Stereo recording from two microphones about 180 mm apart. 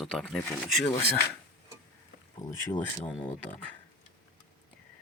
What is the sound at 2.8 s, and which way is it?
Speech, 10° left (ahead or behind).